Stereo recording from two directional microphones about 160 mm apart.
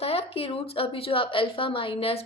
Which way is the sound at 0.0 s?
40° left (ahead or behind).